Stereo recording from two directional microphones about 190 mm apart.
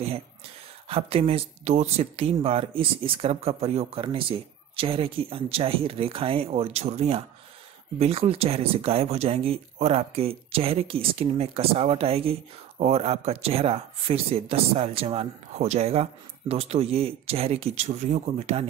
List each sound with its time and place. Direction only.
0.8 s speech: 30° right (ahead or behind)